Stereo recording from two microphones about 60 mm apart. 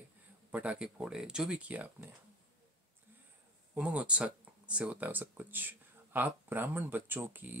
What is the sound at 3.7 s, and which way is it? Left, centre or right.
Speech, right.